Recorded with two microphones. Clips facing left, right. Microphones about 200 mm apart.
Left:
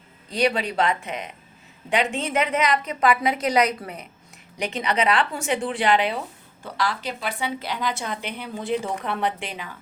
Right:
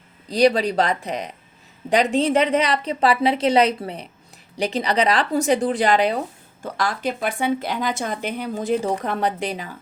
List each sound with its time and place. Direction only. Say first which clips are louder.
0.3 s speech: right 6 dB; 35° right (ahead or behind)